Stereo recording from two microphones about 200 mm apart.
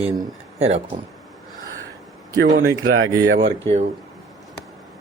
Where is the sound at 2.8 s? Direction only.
90° right.